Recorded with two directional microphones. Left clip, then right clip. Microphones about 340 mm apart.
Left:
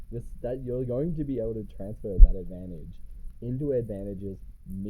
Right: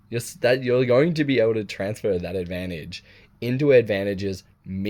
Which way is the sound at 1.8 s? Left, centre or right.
Right.